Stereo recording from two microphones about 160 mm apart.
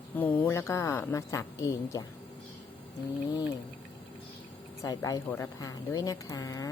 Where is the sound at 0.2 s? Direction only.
10° left (ahead or behind).